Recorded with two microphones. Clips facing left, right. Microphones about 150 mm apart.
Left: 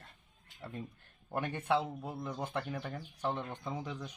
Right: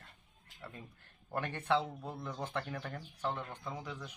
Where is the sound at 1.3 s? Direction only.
15° left (ahead or behind).